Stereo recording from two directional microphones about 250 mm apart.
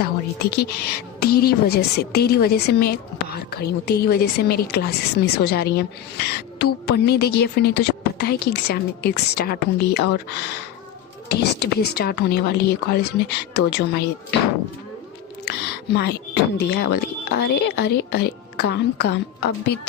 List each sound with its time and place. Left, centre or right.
0.0 s a woman's voice: left
15.4 s a woman's voice: left